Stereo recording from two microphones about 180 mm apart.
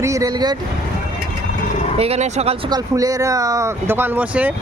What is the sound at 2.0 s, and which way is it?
Speech, 35° right (ahead or behind).